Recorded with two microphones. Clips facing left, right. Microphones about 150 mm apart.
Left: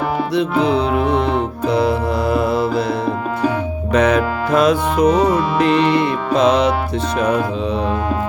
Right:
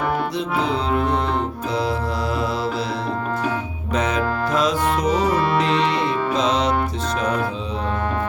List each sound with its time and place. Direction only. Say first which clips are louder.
0.6 s music: left 5 dB; 65° left (ahead or behind)
3.9 s music: left 6 dB; 65° left (ahead or behind)